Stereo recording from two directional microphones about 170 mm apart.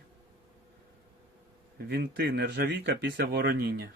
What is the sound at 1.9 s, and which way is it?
Speech, 65° right (ahead or behind).